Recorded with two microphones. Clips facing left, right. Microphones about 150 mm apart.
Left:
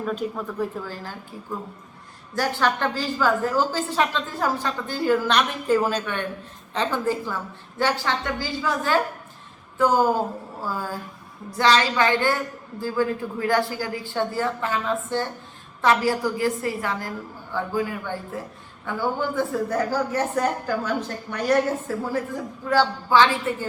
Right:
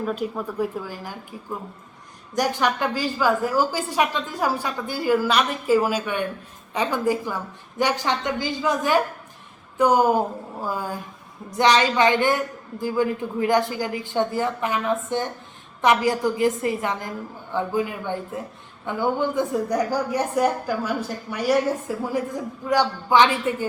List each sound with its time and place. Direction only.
0.0 s a woman's voice: 5° right (ahead or behind)
2.3 s a woman's voice: 15° right (ahead or behind)